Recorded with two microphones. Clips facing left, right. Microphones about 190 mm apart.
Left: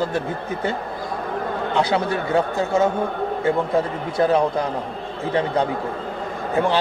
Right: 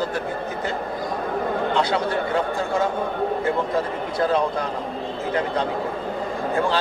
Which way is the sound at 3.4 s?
25° left (ahead or behind).